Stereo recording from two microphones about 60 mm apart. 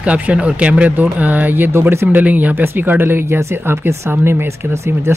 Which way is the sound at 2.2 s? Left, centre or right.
Right.